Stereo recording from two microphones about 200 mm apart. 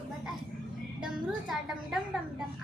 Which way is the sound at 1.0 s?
Centre (ahead or behind).